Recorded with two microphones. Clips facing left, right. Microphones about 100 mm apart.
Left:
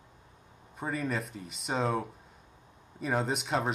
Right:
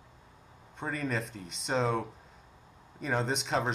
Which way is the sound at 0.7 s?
5° left (ahead or behind).